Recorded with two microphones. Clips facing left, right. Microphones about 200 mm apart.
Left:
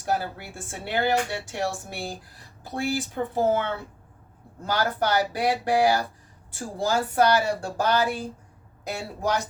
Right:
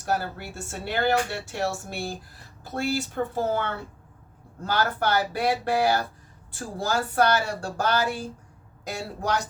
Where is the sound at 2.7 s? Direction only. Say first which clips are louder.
Even; 15° left (ahead or behind).